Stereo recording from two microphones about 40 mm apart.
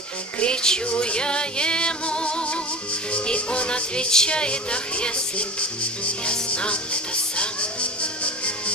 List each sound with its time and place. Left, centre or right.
0.4 s music: left
3.1 s speech: left
6.3 s music: left